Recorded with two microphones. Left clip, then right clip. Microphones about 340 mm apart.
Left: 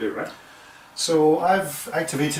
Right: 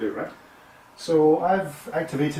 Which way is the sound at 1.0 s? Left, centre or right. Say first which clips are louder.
Left 1 dB; right.